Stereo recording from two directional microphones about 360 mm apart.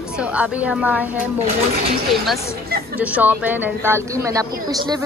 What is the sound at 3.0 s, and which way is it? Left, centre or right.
Speech, centre.